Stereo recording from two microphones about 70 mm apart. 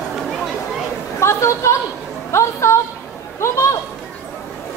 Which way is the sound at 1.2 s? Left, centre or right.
Left.